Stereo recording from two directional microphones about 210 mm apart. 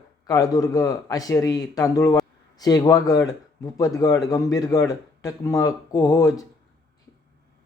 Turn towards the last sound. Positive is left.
turn(degrees=15)  # may be behind; listen again after turning